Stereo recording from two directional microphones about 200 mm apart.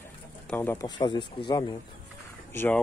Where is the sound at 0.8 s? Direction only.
20° left (ahead or behind).